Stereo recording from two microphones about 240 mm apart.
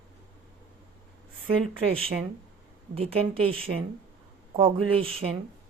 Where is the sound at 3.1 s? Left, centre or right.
Right.